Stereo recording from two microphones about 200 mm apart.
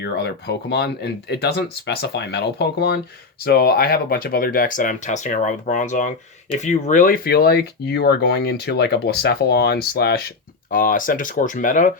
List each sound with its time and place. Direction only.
0.0 s speech: 55° left (ahead or behind); by 11.9 s 40° left (ahead or behind)